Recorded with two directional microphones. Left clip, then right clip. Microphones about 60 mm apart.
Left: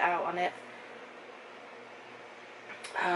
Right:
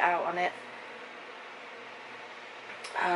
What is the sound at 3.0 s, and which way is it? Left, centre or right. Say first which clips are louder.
Speech: right 1 dB; centre.